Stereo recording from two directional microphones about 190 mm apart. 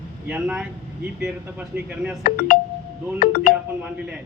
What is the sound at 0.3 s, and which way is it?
Speech, 5° right (ahead or behind).